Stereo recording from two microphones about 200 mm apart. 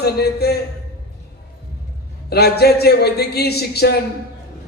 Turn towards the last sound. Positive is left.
turn(degrees=55)  # may be behind; listen again after turning